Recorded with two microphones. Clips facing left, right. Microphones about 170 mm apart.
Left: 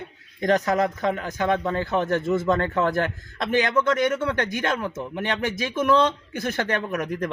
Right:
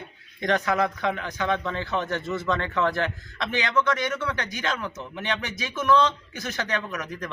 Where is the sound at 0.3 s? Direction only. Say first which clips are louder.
Left 3 dB; 40° left (ahead or behind).